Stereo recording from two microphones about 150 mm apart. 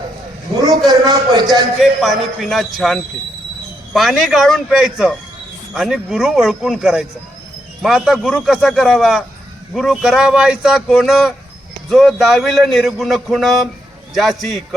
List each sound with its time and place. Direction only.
0.9 s a man's voice: 25° right (ahead or behind)
1.5 s speech: centre (ahead or behind)